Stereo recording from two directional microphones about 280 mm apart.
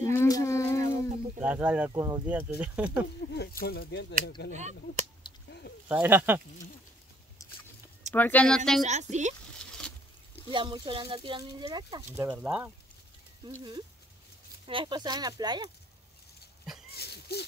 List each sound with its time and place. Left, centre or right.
0.1 s a sound: centre
1.4 s speech: centre
3.6 s speech: left
4.6 s a woman's voice: right
5.9 s speech: centre
8.1 s speech: centre
8.8 s a woman's voice: right
9.6 s rodents: centre
10.5 s speech: centre
12.3 s speech: centre
13.5 s speech: centre
16.9 s a sound: left